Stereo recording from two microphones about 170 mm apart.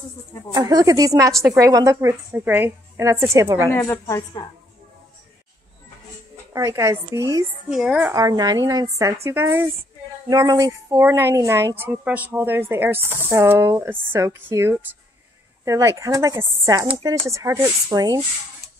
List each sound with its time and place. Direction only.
0.5 s a woman's voice: 20° right (ahead or behind)
3.7 s a woman's voice: 15° left (ahead or behind)
6.5 s a woman's voice: 15° right (ahead or behind)
7.7 s a woman's voice: 5° right (ahead or behind)
8.1 s a woman's voice: 20° right (ahead or behind)